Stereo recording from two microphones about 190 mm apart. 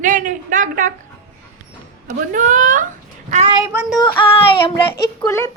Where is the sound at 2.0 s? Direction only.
45° right (ahead or behind).